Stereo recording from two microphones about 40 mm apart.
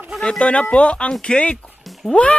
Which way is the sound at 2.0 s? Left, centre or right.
Centre.